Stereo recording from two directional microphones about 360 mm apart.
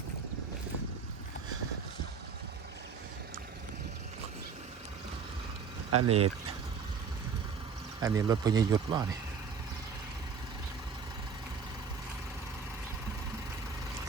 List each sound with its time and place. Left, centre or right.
5.9 s speech: right
8.0 s speech: centre